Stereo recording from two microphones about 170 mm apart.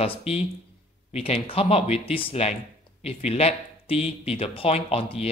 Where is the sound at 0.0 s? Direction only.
35° left (ahead or behind).